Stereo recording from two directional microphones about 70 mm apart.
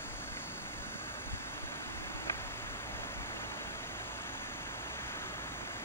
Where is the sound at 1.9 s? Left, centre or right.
Left.